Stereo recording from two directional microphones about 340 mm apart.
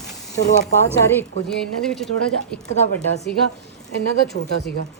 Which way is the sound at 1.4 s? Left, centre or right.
Centre.